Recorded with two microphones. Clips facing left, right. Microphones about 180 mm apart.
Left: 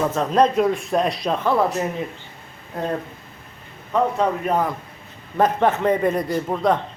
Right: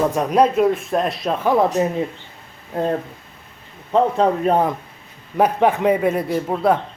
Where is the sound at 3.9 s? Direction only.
30° right (ahead or behind).